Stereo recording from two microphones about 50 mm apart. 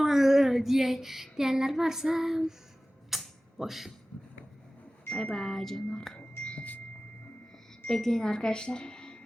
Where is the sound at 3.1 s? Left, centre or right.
Centre.